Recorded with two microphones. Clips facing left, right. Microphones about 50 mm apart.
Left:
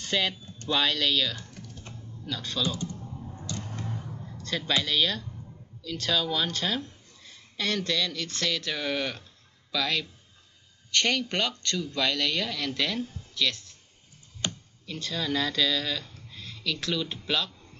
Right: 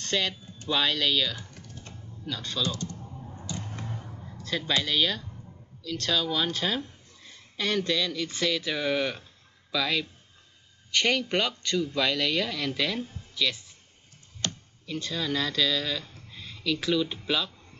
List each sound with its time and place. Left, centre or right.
0.0 s speech: centre
2.6 s speech: centre
3.3 s a sound: centre
4.8 s speech: centre
14.4 s tick-tock: centre
14.9 s speech: centre